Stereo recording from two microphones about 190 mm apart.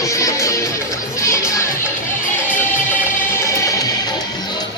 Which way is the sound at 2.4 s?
10° left (ahead or behind).